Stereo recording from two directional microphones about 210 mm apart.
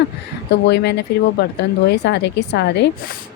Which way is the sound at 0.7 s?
50° left (ahead or behind).